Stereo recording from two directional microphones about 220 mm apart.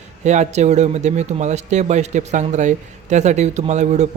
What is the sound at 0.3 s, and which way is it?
Speech, 30° right (ahead or behind).